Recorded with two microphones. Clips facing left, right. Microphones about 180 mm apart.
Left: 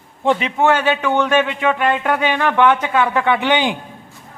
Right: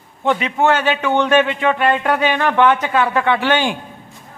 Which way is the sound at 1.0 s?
15° right (ahead or behind).